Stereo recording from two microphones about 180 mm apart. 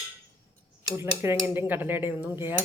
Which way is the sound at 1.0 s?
10° right (ahead or behind).